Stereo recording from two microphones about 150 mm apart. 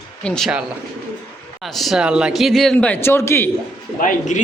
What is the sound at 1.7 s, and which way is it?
A man's voice, centre (ahead or behind).